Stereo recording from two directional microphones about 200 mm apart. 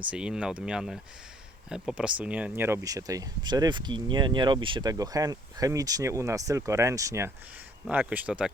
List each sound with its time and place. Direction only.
0.1 s speech: 5° right (ahead or behind)